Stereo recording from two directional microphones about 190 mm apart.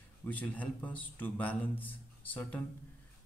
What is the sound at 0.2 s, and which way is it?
Speech, 10° left (ahead or behind).